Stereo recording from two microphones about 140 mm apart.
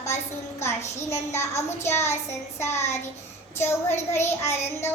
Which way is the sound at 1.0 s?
20° left (ahead or behind).